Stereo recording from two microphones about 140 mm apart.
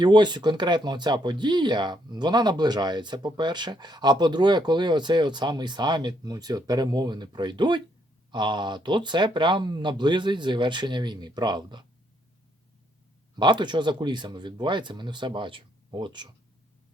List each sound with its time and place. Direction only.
0.0 s speech: 30° right (ahead or behind)
13.4 s speech: 35° right (ahead or behind)